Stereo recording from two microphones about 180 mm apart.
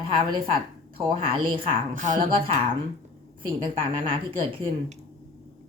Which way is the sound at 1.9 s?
45° right (ahead or behind).